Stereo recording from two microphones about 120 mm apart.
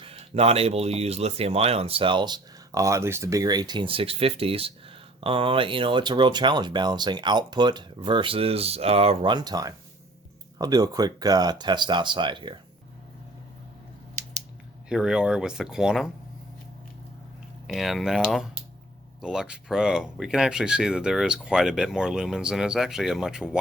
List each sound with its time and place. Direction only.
0.0 s speech: 55° right (ahead or behind)
9.2 s speech: 35° right (ahead or behind)
14.8 s speech: 5° right (ahead or behind)
17.7 s speech: centre (ahead or behind)